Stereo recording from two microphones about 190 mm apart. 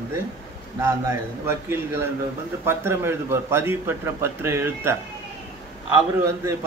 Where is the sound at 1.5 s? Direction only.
10° right (ahead or behind).